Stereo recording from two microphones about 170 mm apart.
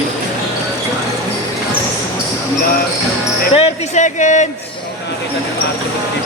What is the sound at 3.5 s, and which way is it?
Speech, 40° left (ahead or behind).